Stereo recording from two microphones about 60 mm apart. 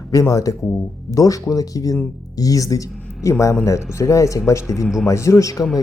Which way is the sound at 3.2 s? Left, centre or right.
Left.